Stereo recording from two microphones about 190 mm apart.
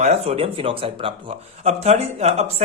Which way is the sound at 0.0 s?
35° right (ahead or behind).